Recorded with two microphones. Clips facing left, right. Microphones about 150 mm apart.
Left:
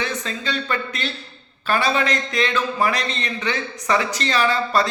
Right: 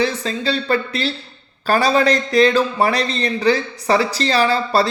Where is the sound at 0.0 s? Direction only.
35° right (ahead or behind).